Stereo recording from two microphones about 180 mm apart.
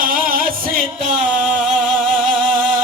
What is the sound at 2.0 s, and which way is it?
Music, 45° right (ahead or behind).